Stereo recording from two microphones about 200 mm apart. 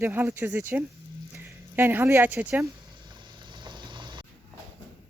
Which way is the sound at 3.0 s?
20° right (ahead or behind).